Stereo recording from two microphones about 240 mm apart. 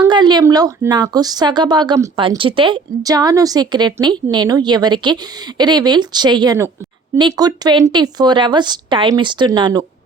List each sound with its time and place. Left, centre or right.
0.0 s speech: centre